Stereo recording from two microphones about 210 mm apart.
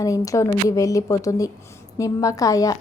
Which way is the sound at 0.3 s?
15° left (ahead or behind).